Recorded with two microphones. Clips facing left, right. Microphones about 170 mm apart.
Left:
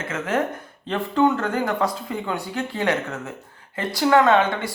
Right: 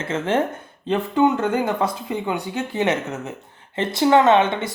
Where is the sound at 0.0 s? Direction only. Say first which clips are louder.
Right 3 dB; 30° right (ahead or behind).